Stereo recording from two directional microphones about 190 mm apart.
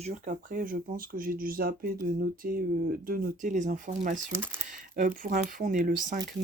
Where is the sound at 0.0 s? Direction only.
45° right (ahead or behind).